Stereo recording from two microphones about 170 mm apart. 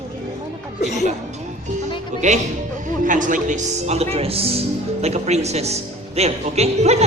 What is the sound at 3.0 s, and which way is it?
Speech, 50° right (ahead or behind).